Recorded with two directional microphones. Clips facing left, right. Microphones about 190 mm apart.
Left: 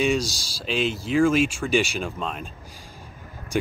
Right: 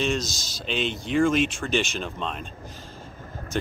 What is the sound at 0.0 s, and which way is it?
Speech, 5° left (ahead or behind).